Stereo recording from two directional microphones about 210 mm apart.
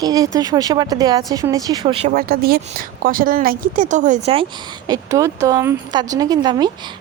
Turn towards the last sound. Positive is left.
turn(degrees=-20)  # may be behind; listen again after turning